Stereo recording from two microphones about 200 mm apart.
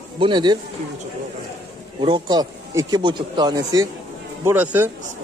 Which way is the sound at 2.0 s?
20° right (ahead or behind).